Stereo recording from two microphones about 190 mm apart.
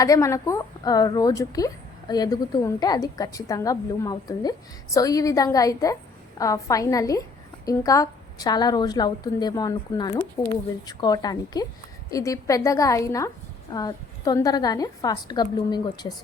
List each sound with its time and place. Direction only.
0.0 s a woman's voice: 15° left (ahead or behind)
10.2 s speech: 10° left (ahead or behind)
10.8 s a woman's voice: 20° left (ahead or behind)